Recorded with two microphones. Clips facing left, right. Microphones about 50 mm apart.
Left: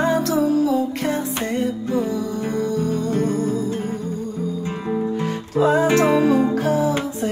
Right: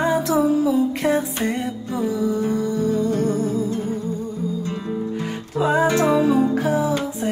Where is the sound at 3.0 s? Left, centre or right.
Left.